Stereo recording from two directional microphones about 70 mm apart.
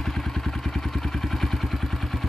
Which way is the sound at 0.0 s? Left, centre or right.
Centre.